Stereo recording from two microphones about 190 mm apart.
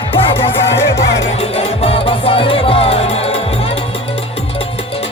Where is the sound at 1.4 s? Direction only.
30° left (ahead or behind).